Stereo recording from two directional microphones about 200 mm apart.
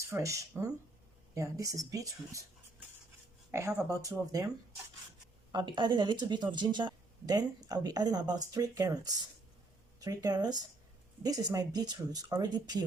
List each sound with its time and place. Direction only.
0.1 s speech: 15° right (ahead or behind)
3.5 s speech: 15° right (ahead or behind)
5.5 s speech: 20° right (ahead or behind)